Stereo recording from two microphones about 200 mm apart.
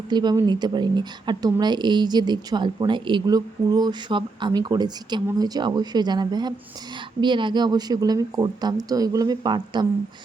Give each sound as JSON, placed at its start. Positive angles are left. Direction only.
{"t": 0.1, "sound": "speech", "side_deg": -20}